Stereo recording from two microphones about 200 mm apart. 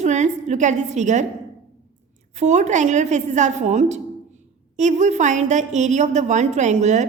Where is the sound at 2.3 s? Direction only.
35° right (ahead or behind).